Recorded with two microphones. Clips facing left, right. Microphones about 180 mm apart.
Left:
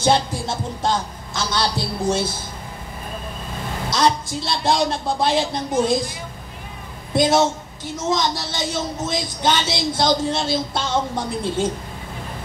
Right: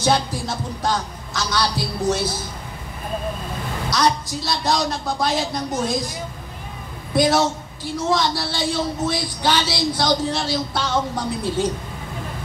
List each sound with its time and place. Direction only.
0.0 s a woman's voice: 25° left (ahead or behind)
3.9 s a woman's voice: 25° left (ahead or behind)
7.2 s a woman's voice: 25° left (ahead or behind)